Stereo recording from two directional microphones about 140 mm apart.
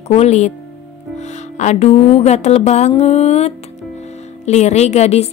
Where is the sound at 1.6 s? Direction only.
55° left (ahead or behind).